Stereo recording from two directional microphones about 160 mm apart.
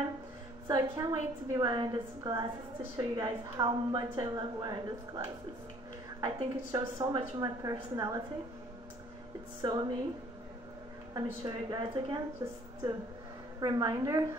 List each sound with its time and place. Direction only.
0.7 s a woman's voice: 25° right (ahead or behind)
9.6 s a woman's voice: 25° right (ahead or behind)
11.4 s a woman's voice: 25° right (ahead or behind)
13.6 s a woman's voice: 25° right (ahead or behind)